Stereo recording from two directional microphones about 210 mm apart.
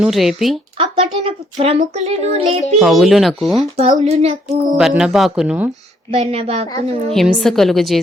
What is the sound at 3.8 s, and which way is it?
Child singing, 30° right (ahead or behind).